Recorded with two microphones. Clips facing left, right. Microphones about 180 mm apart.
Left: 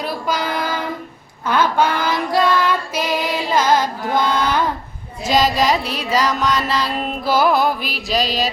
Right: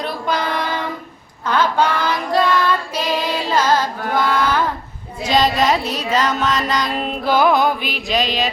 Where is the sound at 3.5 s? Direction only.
15° left (ahead or behind).